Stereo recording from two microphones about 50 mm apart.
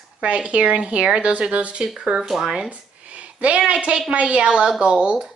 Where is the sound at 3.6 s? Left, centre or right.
Right.